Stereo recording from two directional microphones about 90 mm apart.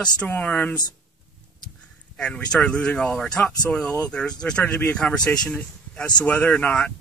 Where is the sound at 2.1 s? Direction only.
10° left (ahead or behind).